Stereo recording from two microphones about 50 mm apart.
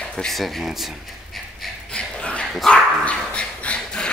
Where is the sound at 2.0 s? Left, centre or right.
Left.